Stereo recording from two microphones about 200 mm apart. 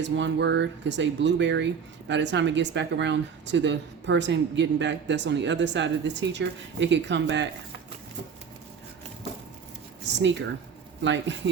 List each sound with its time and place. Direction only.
0.0 s speech: 60° right (ahead or behind)
11.0 s speech: 65° right (ahead or behind)